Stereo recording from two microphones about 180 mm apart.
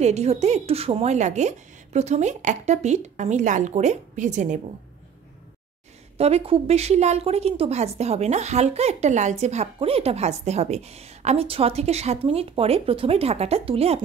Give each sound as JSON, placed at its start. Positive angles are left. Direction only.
{"t": 0.0, "sound": "speech", "side_deg": -40}
{"t": 6.1, "sound": "speech", "side_deg": -35}